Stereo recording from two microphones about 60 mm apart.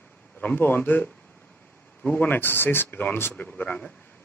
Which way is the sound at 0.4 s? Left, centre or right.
Left.